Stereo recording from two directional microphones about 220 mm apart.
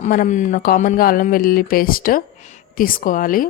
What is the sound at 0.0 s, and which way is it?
Speech, 35° left (ahead or behind).